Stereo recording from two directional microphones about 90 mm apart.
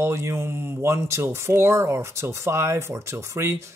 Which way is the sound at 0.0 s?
30° right (ahead or behind).